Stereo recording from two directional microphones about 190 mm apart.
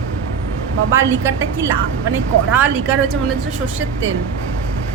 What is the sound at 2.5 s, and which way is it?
Speech, 10° right (ahead or behind).